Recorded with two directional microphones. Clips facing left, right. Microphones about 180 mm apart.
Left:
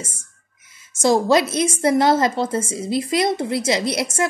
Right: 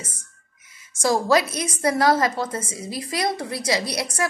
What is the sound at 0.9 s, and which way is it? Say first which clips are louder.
A woman's voice: left 3 dB; 25° left (ahead or behind).